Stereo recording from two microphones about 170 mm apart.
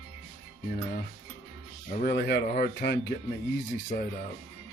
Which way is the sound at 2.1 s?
75° left (ahead or behind).